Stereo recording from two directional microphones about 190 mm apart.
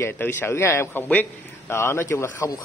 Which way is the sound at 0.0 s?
10° left (ahead or behind).